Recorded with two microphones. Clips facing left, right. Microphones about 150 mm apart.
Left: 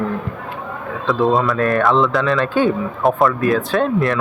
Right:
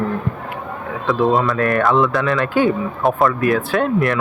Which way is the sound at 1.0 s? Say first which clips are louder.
Even; centre (ahead or behind).